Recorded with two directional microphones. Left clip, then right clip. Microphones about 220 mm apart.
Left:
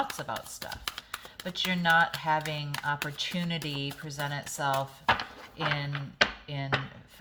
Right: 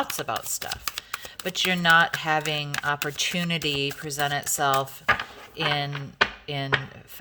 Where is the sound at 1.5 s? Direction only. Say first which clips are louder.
Right 6 dB; 50° right (ahead or behind).